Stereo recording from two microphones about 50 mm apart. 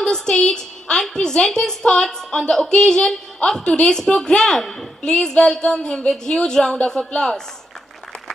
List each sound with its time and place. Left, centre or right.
0.0 s a woman's voice: centre
5.0 s a woman's voice: centre